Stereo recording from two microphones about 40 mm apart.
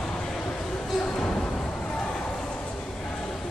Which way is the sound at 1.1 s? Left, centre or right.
Left.